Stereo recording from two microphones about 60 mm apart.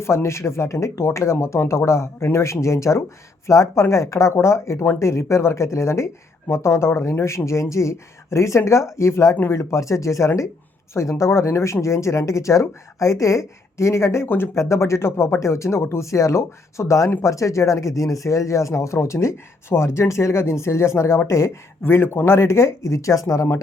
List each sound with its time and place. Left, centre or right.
0.0 s speech: left
14.5 s speech: left
21.8 s speech: left